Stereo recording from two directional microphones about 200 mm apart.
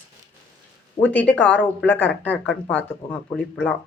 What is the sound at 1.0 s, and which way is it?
Speech, 10° left (ahead or behind).